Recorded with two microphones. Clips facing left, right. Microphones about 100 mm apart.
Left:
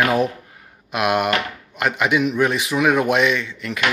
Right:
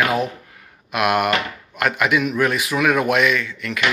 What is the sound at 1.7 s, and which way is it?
Speech, 20° left (ahead or behind).